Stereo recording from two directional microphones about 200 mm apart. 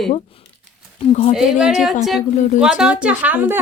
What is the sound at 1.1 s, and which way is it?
Speech, 30° left (ahead or behind).